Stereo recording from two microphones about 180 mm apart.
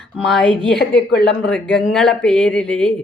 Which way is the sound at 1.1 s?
60° left (ahead or behind).